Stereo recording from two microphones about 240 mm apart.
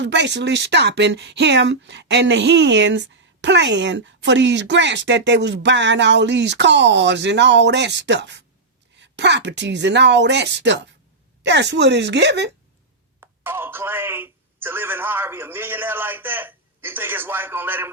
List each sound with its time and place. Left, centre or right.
0.0 s speech: right
13.1 s speech: centre